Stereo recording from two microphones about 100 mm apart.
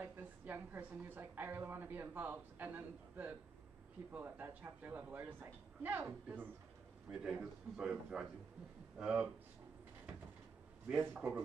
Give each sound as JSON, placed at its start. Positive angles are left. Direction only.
{"t": 0.0, "sound": "a woman's voice", "side_deg": -15}
{"t": 7.1, "sound": "a man's voice", "side_deg": -5}
{"t": 11.2, "sound": "a woman's voice", "side_deg": -25}